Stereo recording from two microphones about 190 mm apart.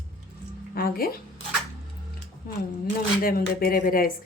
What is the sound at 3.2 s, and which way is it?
Speech, 50° left (ahead or behind).